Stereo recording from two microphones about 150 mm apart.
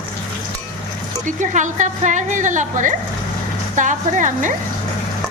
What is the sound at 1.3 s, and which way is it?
A woman's voice, 55° right (ahead or behind).